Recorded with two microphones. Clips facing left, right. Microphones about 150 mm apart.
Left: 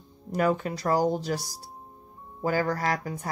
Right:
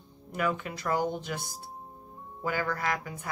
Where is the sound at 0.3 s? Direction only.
35° left (ahead or behind).